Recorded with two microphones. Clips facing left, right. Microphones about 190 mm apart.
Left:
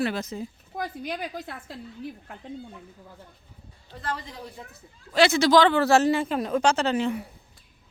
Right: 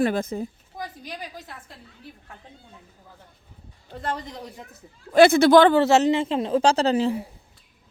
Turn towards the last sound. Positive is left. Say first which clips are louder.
# right 4 dB
turn(degrees=-30)  # may be behind; listen again after turning